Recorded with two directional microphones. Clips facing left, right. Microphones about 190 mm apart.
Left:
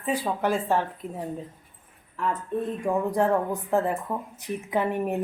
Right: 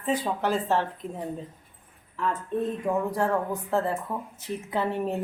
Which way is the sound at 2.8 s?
15° left (ahead or behind).